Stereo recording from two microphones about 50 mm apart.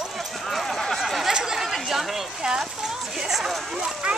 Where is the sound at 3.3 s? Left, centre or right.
Centre.